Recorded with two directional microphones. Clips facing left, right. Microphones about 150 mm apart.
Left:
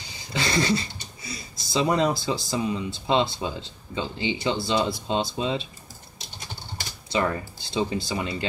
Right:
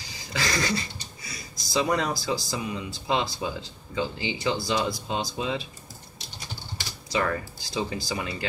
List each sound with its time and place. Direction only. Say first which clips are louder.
0.3 s speech: left 4 dB; 25° left (ahead or behind)
7.7 s speech: left 3 dB; 25° left (ahead or behind)